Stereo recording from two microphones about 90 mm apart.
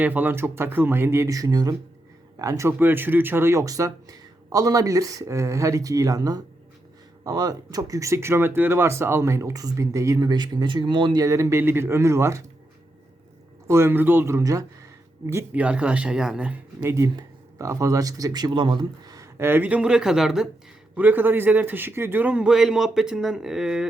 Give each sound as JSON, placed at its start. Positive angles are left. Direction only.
{"t": 0.0, "sound": "speech", "side_deg": -20}
{"t": 2.7, "sound": "speech", "side_deg": -20}
{"t": 10.2, "sound": "speech", "side_deg": -50}
{"t": 11.2, "sound": "speech", "side_deg": -35}
{"t": 13.7, "sound": "speech", "side_deg": -30}
{"t": 15.5, "sound": "speech", "side_deg": -15}
{"t": 16.8, "sound": "speech", "side_deg": -30}
{"t": 19.4, "sound": "speech", "side_deg": -25}
{"t": 20.9, "sound": "speech", "side_deg": -20}